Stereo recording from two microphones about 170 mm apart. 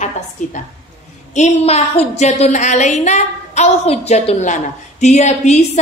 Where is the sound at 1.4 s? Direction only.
40° left (ahead or behind).